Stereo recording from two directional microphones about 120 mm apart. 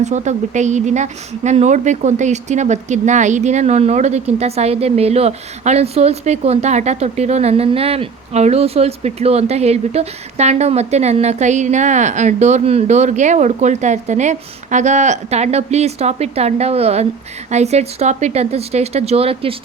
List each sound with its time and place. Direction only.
0.0 s speech: 80° right; by 19.5 s 50° right (ahead or behind)